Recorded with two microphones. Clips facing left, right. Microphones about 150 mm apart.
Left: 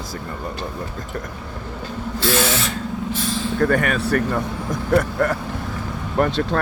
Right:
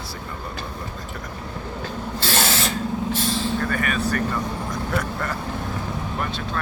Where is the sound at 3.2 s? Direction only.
30° right (ahead or behind).